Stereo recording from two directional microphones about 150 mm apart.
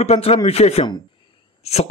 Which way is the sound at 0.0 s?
45° left (ahead or behind).